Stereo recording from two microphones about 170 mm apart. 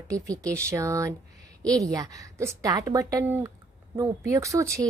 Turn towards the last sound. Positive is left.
turn(degrees=-20)  # may be behind; listen again after turning